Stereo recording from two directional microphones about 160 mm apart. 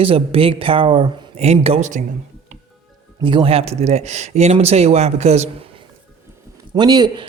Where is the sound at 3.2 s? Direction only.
35° right (ahead or behind).